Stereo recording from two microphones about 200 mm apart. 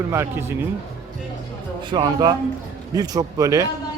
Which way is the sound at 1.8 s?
20° right (ahead or behind).